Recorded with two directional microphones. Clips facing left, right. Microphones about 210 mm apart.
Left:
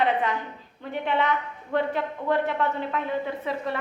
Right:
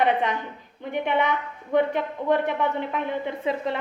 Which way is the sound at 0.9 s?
15° right (ahead or behind).